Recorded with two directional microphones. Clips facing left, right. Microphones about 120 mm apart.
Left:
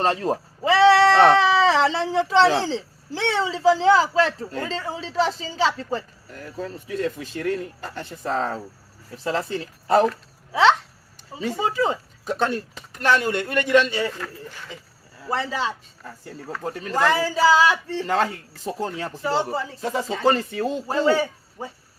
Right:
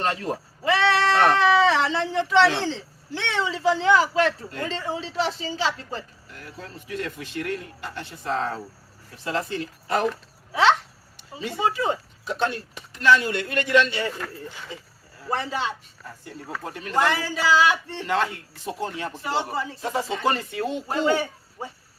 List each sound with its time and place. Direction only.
0.0 s speech: 30° left (ahead or behind); by 13.9 s 50° left (ahead or behind)
14.2 s speech: 5° right (ahead or behind)
15.3 s speech: 30° left (ahead or behind)